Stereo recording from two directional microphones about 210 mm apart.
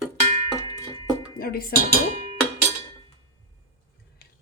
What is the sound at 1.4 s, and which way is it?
Speech, 45° left (ahead or behind).